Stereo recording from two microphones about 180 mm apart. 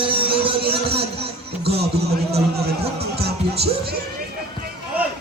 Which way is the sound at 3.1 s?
65° right (ahead or behind).